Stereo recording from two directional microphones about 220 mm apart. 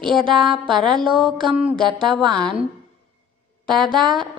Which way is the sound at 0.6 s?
20° right (ahead or behind).